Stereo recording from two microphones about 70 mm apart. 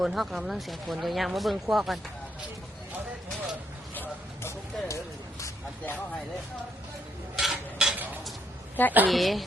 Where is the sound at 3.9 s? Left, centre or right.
Left.